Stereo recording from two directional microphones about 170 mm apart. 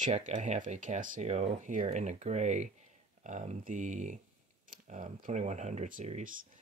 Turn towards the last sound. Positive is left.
turn(degrees=-45)  # may be behind; listen again after turning